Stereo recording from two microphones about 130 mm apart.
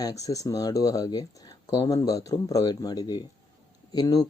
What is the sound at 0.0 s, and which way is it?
Speech, 25° left (ahead or behind).